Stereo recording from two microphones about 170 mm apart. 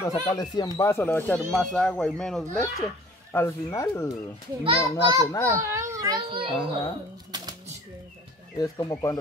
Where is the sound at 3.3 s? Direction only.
15° left (ahead or behind).